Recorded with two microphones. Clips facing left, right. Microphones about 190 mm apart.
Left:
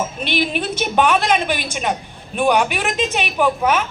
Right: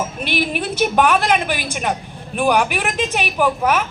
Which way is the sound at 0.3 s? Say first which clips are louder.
Even; 5° right (ahead or behind).